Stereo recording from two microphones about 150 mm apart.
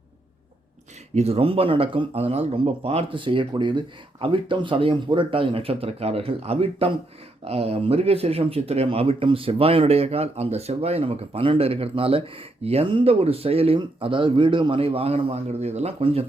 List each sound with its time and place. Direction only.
1.1 s speech: 45° right (ahead or behind)